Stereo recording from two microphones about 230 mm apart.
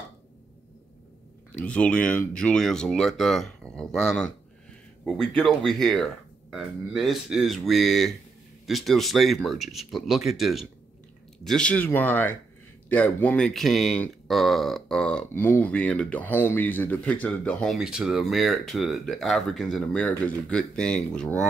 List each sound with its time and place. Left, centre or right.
1.5 s speech: centre